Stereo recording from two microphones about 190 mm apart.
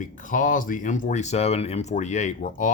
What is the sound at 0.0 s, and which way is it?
Speech, 45° left (ahead or behind).